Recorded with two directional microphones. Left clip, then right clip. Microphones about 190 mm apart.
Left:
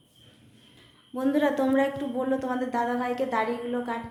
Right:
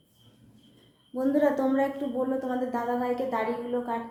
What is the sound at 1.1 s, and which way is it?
A woman's voice, 10° left (ahead or behind).